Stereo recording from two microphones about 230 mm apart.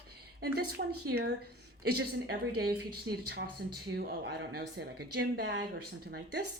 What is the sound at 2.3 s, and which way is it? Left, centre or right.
A woman's voice, right.